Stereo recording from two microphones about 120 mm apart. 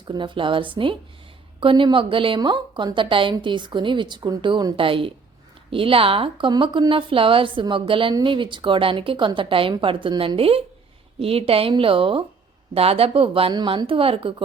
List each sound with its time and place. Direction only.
0.1 s a woman's voice: 40° right (ahead or behind)